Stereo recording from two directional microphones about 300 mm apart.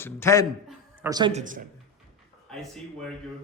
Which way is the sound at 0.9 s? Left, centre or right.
Centre.